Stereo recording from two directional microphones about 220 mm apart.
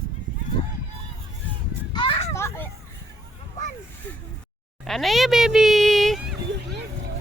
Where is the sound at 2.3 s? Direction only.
10° left (ahead or behind).